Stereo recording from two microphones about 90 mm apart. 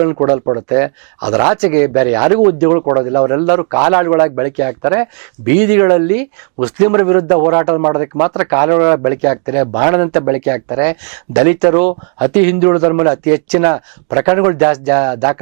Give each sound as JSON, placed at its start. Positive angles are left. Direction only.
{"t": 0.0, "sound": "speech", "side_deg": -20}